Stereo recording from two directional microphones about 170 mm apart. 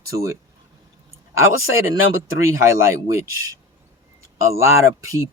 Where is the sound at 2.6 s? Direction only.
15° right (ahead or behind).